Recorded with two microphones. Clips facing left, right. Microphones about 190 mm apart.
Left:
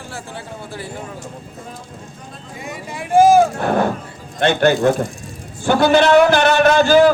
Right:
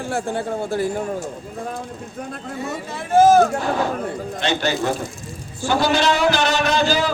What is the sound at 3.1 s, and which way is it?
Speech, 10° left (ahead or behind).